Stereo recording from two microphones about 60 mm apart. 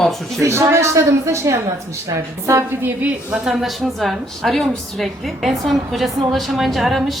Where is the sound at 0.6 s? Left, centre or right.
Right.